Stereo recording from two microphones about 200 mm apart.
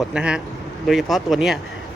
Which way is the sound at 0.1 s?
5° right (ahead or behind).